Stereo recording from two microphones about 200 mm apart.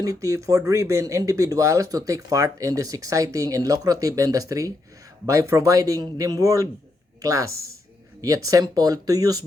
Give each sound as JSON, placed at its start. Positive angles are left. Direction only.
{"t": 0.0, "sound": "speech", "side_deg": -15}